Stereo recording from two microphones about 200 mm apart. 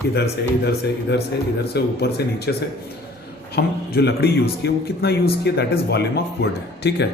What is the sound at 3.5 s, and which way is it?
A man's voice, 55° left (ahead or behind).